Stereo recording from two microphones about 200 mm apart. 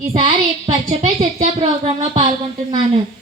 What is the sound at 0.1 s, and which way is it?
Speech, 30° right (ahead or behind).